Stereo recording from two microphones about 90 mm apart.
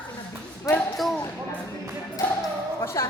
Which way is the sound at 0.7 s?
40° left (ahead or behind).